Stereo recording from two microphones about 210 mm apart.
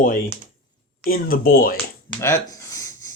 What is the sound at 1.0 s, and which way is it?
Speech, 45° left (ahead or behind).